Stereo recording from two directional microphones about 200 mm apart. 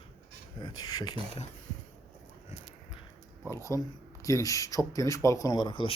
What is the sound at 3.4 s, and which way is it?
Speech, 15° left (ahead or behind).